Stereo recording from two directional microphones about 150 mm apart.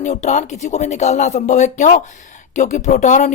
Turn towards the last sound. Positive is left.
turn(degrees=55)  # may be behind; listen again after turning